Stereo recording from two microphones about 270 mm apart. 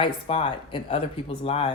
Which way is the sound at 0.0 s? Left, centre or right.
Centre.